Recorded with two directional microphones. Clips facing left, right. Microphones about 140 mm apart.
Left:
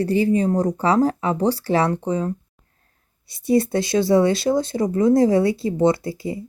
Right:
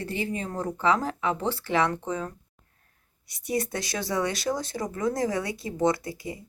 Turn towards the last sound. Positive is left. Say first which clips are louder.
# left 6 dB
turn(degrees=30)  # may be behind; listen again after turning